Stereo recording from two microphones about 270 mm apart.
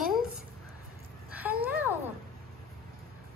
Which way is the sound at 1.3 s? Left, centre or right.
Centre.